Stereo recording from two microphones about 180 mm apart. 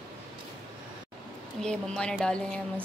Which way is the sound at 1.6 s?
5° left (ahead or behind).